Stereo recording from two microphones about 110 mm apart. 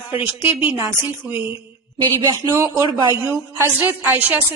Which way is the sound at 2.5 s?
30° right (ahead or behind).